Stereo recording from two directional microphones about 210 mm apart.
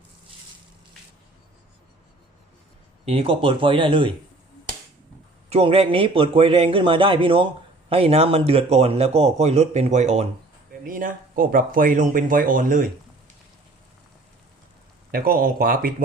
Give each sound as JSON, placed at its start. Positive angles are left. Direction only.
{"t": 3.1, "sound": "a man's voice", "side_deg": -25}
{"t": 5.5, "sound": "a man's voice", "side_deg": -30}
{"t": 15.1, "sound": "speech", "side_deg": -45}